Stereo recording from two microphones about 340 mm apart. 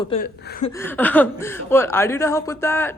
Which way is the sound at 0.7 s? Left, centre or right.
Centre.